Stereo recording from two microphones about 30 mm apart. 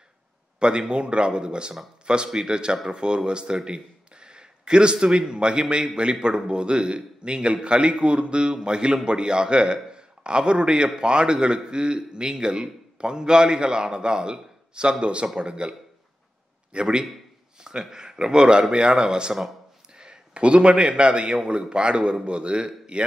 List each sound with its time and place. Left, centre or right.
0.6 s a man's voice: right
16.7 s a man's voice: right
17.6 s a man's voice: right